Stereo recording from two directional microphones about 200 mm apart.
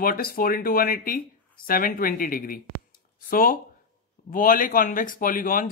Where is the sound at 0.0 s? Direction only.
45° left (ahead or behind).